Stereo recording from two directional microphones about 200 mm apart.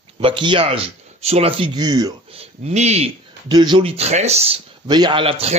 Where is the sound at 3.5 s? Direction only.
20° right (ahead or behind).